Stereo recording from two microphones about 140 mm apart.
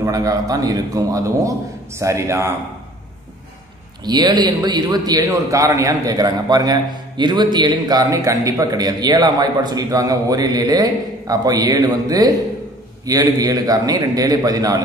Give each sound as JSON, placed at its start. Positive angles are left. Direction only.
{"t": 0.0, "sound": "a man's voice", "side_deg": -25}
{"t": 4.0, "sound": "a man's voice", "side_deg": -30}